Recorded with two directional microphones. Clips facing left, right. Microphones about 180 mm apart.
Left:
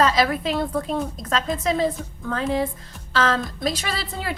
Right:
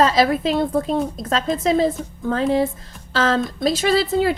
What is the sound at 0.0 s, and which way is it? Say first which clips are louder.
A woman's voice: right 3 dB; 30° right (ahead or behind).